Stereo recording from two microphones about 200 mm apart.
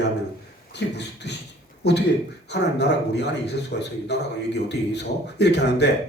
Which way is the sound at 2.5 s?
60° left (ahead or behind).